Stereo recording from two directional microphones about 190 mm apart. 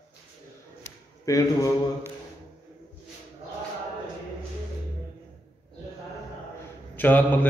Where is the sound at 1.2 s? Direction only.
15° left (ahead or behind).